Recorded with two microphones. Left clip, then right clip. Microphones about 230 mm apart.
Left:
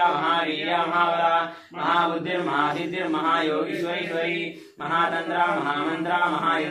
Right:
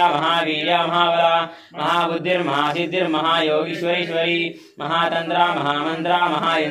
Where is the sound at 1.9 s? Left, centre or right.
Right.